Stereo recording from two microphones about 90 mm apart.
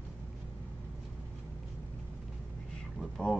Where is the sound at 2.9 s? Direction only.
10° left (ahead or behind).